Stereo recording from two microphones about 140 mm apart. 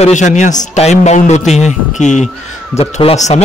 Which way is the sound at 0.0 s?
60° left (ahead or behind).